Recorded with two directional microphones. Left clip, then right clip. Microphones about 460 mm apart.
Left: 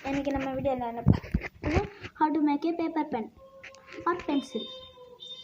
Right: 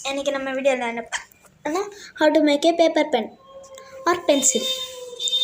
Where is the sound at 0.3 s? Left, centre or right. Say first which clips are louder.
Right 10 dB; left.